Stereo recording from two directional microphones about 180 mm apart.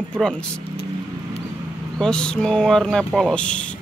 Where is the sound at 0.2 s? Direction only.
5° left (ahead or behind).